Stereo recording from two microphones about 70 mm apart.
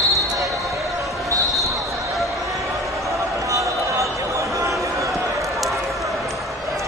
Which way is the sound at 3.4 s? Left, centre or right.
Right.